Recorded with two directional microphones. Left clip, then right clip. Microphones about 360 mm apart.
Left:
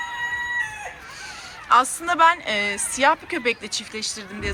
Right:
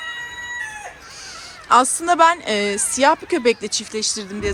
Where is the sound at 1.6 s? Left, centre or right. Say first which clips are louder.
Right 3 dB; centre.